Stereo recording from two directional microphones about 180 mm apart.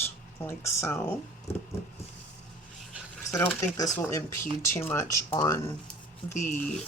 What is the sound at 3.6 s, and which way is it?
Speech, 20° left (ahead or behind).